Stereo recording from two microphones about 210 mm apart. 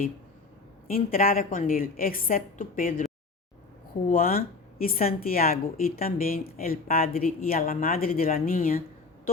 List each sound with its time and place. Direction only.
0.9 s speech: 45° left (ahead or behind)
4.1 s speech: 45° left (ahead or behind)